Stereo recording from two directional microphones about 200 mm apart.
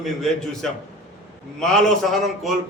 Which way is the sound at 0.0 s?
Centre (ahead or behind).